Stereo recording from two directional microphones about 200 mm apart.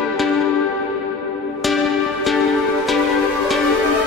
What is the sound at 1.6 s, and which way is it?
Music, centre (ahead or behind).